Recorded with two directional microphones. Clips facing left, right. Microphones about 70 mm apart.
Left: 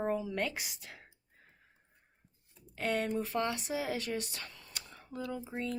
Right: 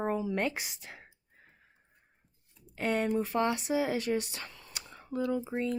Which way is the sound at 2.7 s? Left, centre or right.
Right.